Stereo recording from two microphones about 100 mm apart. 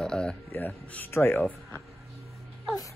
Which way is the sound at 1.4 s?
5° left (ahead or behind).